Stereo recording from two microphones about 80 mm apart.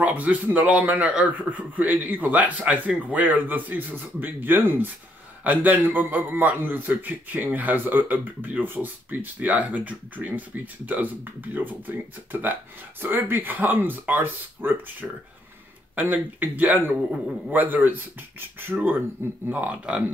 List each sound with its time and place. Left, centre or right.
0.0 s a man's voice: centre